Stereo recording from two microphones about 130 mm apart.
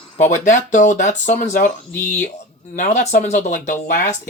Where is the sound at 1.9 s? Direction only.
15° left (ahead or behind).